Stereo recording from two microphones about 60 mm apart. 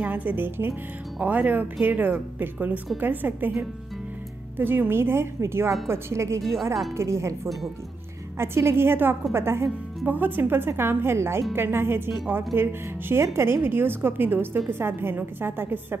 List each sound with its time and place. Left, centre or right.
0.0 s speech: right
1.2 s speech: right
4.6 s a woman's voice: right
8.4 s a woman's voice: right
10.0 s speech: right